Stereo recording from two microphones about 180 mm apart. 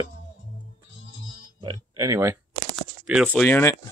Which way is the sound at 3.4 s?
10° left (ahead or behind).